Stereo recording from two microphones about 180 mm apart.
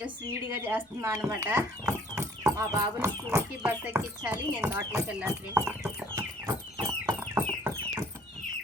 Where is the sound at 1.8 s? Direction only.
15° right (ahead or behind).